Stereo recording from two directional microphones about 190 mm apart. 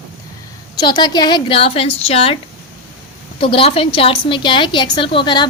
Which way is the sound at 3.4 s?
30° left (ahead or behind).